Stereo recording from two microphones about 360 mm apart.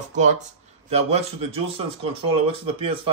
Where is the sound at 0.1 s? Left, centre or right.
Centre.